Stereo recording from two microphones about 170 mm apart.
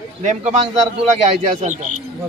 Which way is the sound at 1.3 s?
45° right (ahead or behind).